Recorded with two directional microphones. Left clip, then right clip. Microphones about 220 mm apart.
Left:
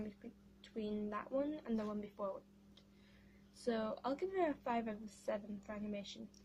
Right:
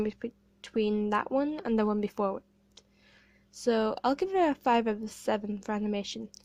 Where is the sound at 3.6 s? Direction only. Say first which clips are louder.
Right 13 dB; 40° right (ahead or behind).